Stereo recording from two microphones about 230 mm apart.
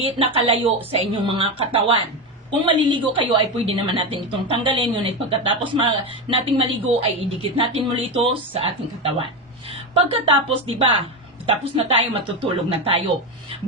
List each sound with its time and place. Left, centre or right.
0.0 s a woman's voice: right